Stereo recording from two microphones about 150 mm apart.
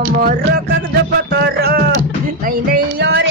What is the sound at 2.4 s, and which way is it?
Music, 85° right.